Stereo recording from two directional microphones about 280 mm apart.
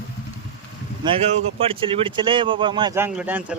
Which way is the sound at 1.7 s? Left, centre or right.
Centre.